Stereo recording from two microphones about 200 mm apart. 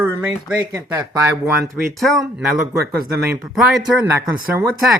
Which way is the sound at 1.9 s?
Centre (ahead or behind).